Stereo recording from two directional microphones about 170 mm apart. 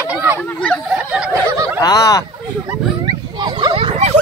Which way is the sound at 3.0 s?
25° right (ahead or behind).